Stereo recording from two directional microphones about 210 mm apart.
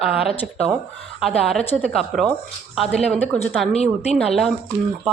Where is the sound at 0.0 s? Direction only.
5° right (ahead or behind).